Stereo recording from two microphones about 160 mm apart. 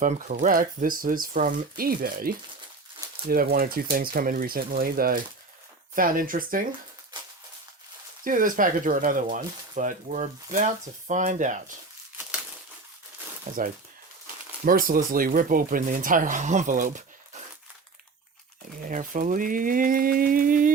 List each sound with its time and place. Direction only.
0.0 s speech: 55° right (ahead or behind)
7.1 s a sound: 30° right (ahead or behind)
8.2 s speech: 60° right (ahead or behind)
13.5 s speech: 55° right (ahead or behind)
18.8 s speech: 55° right (ahead or behind)